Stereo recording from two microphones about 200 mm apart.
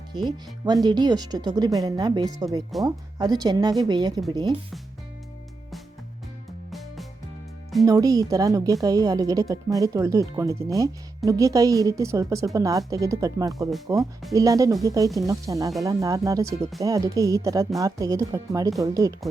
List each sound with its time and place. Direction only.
0.1 s speech: 20° right (ahead or behind)
6.7 s music: centre (ahead or behind)
7.9 s a woman's voice: 20° right (ahead or behind)